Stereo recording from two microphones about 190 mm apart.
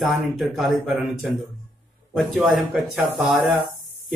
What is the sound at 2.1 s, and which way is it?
A man's voice, centre (ahead or behind).